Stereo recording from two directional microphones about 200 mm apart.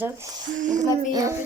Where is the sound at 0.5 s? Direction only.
40° right (ahead or behind).